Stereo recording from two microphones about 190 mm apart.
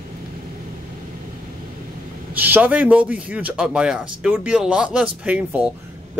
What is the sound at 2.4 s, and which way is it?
Speech, 10° right (ahead or behind).